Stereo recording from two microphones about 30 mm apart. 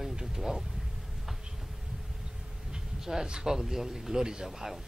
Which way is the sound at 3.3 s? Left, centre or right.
Centre.